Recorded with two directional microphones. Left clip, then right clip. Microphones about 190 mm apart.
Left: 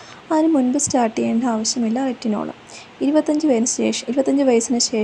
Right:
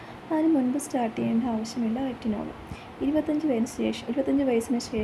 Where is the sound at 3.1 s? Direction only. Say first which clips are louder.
Left 9 dB; 20° left (ahead or behind).